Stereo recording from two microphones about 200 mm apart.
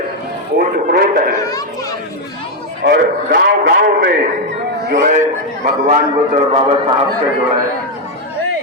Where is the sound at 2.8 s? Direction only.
60° right (ahead or behind).